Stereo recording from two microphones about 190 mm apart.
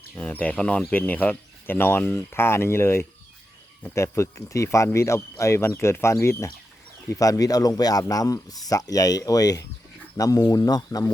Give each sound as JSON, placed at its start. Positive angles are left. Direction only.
{"t": 0.2, "sound": "speech", "side_deg": 10}